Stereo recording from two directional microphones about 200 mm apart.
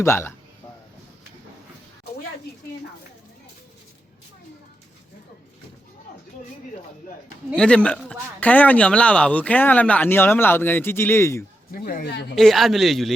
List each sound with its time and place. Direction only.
0.0 s speech: 10° left (ahead or behind)
7.5 s speech: 5° left (ahead or behind)
11.7 s speech: 45° left (ahead or behind)
12.4 s speech: centre (ahead or behind)